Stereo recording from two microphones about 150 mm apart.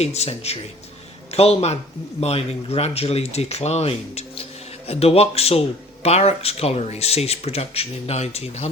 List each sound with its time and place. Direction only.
0.0 s speech: 45° left (ahead or behind)